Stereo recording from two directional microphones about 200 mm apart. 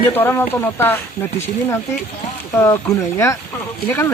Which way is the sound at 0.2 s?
10° left (ahead or behind).